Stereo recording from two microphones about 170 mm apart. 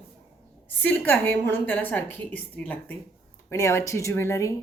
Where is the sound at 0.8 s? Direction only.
10° left (ahead or behind).